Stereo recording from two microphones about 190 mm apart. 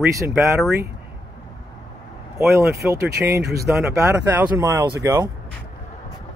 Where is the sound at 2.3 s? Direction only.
15° right (ahead or behind).